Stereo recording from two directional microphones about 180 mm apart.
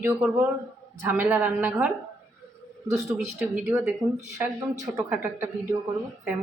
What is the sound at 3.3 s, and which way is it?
A woman's voice, 5° right (ahead or behind).